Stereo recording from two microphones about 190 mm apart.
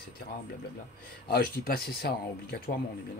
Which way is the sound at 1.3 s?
55° left (ahead or behind).